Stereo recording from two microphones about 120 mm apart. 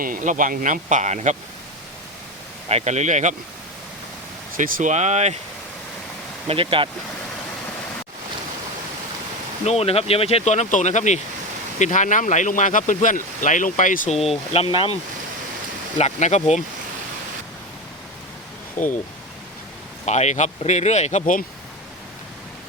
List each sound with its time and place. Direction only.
0.2 s speech: 90° right
2.6 s speech: 65° right (ahead or behind)
4.8 s speech: 85° right
6.5 s speech: 50° right (ahead or behind)
9.6 s speech: 60° left (ahead or behind); by 11.2 s 80° left
11.8 s speech: 90° left; by 14.9 s 50° left (ahead or behind)
16.0 s speech: 70° left (ahead or behind)
18.8 s speech: 90° left
20.1 s speech: 70° left (ahead or behind)